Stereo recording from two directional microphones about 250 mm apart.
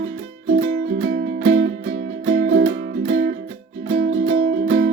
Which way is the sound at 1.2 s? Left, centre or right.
Right.